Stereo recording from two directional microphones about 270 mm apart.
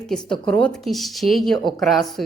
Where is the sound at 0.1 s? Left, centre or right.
Centre.